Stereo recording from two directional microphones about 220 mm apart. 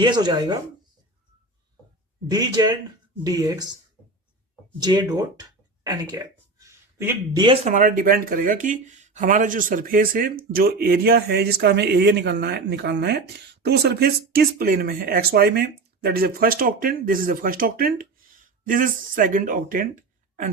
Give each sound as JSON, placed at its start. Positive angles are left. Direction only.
{"t": 0.0, "sound": "speech", "side_deg": -20}
{"t": 2.3, "sound": "speech", "side_deg": -15}
{"t": 4.8, "sound": "speech", "side_deg": -20}